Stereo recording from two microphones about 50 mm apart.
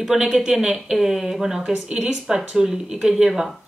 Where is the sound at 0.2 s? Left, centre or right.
Centre.